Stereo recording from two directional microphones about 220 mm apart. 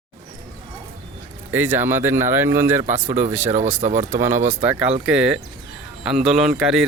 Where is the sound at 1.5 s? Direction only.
10° right (ahead or behind).